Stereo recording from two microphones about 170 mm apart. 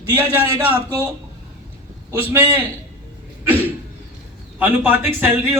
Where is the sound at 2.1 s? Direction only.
10° right (ahead or behind).